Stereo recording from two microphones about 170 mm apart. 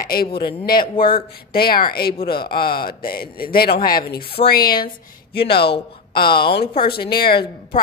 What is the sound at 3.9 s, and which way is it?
Speech, 25° left (ahead or behind).